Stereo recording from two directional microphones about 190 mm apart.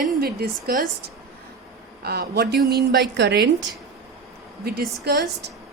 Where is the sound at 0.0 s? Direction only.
55° right (ahead or behind).